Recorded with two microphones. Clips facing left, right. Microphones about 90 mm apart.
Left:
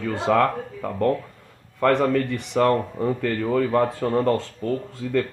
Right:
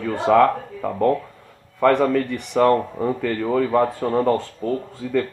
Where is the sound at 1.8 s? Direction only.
50° right (ahead or behind).